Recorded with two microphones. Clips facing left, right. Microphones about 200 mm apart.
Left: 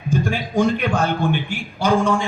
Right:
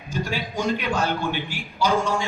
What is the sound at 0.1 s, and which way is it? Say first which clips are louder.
Speech: left 7 dB; 50° left (ahead or behind).